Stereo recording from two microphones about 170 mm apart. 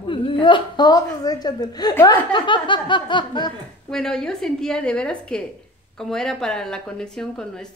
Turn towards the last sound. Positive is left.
turn(degrees=5)  # may be behind; listen again after turning